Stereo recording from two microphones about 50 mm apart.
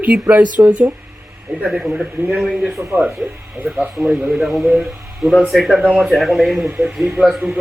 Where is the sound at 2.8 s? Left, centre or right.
Right.